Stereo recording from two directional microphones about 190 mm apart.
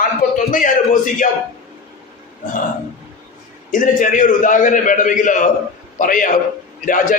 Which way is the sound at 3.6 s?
40° left (ahead or behind).